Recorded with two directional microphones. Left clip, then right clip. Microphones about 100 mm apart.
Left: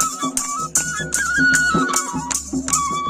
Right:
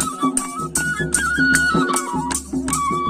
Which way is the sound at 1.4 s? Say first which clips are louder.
Left 1 dB; 20° right (ahead or behind).